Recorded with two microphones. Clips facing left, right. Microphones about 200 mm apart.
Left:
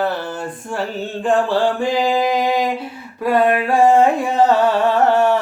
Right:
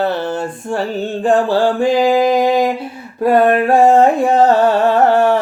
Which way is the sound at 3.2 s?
50° right (ahead or behind).